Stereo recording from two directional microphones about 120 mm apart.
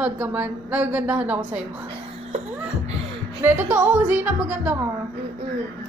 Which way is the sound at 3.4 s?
15° right (ahead or behind).